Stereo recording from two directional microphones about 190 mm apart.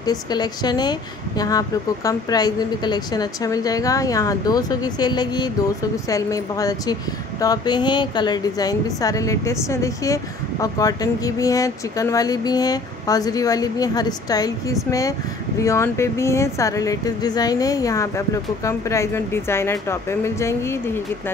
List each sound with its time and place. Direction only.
0.0 s a woman's voice: 20° left (ahead or behind)